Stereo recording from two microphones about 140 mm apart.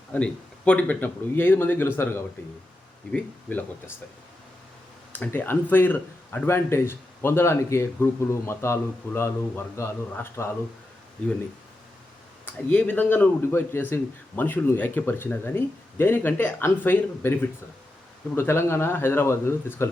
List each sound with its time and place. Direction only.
0.1 s speech: 10° left (ahead or behind)
5.1 s speech: 10° left (ahead or behind)
12.5 s speech: 10° left (ahead or behind)